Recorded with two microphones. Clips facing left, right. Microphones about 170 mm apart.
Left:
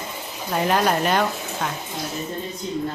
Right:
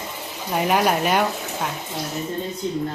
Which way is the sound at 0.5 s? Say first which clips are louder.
Right 1 dB; 10° right (ahead or behind).